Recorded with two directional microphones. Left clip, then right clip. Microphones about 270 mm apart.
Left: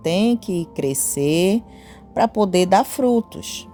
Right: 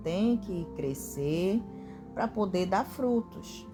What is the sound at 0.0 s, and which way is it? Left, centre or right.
Speech, left.